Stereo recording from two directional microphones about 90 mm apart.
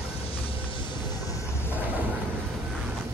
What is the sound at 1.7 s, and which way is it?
Vehicle, 20° right (ahead or behind).